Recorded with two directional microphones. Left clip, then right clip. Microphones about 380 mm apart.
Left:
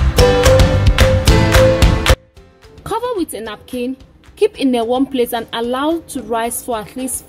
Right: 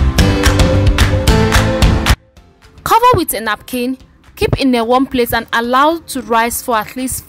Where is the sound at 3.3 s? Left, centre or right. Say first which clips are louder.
Right 7 dB; right.